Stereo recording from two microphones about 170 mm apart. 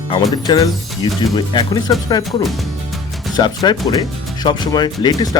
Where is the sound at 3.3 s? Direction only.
25° left (ahead or behind).